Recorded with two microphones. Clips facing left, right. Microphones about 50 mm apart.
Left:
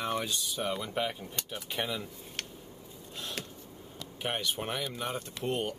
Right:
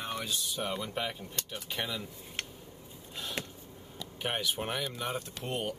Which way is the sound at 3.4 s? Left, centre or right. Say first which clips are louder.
Right 5 dB; right.